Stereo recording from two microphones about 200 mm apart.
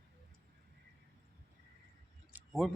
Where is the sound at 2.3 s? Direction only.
5° right (ahead or behind).